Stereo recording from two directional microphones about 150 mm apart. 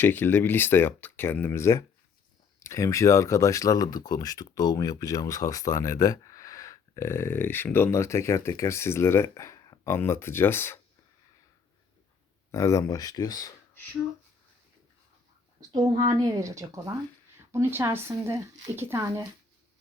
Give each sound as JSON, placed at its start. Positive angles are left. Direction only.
{"t": 0.0, "sound": "speech", "side_deg": 15}
{"t": 12.5, "sound": "speech", "side_deg": 20}
{"t": 15.7, "sound": "a woman's voice", "side_deg": -25}